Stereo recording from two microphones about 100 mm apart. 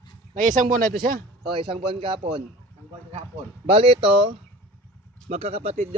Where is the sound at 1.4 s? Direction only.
60° right (ahead or behind).